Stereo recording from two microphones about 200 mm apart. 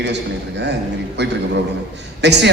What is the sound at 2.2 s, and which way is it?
Speech, 60° right (ahead or behind).